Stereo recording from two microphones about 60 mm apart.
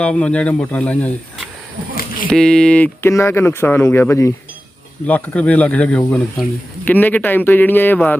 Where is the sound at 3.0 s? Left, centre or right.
Left.